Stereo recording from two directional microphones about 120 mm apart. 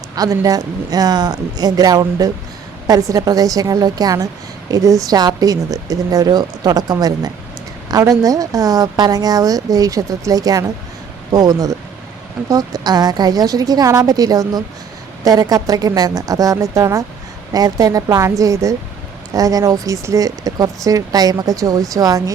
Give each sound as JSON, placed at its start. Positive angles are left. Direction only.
{"t": 0.2, "sound": "a woman's voice", "side_deg": -30}